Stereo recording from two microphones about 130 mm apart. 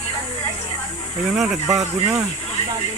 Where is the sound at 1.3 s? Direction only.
5° right (ahead or behind).